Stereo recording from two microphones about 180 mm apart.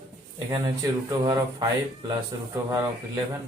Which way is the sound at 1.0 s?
25° right (ahead or behind).